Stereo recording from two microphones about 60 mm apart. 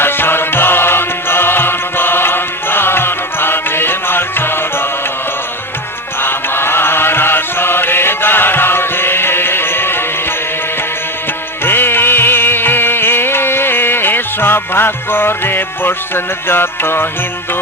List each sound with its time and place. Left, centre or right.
0.0 s music: left
6.2 s music: left
11.6 s music: left